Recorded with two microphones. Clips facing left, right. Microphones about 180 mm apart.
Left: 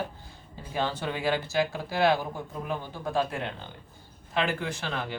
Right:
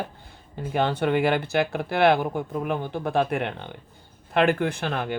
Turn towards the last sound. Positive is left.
turn(degrees=-55)  # may be behind; listen again after turning